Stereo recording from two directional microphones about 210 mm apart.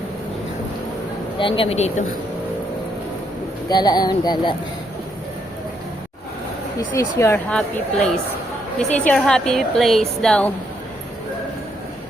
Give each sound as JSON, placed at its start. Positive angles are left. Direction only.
{"t": 1.4, "sound": "speech", "side_deg": 25}
{"t": 3.7, "sound": "speech", "side_deg": 20}
{"t": 6.7, "sound": "a woman's voice", "side_deg": 15}
{"t": 9.0, "sound": "a woman's voice", "side_deg": 5}